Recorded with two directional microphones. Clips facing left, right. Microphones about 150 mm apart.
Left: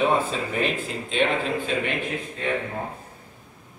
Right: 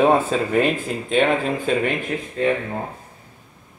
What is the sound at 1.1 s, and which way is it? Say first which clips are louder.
Speech: right 5 dB; 50° right (ahead or behind).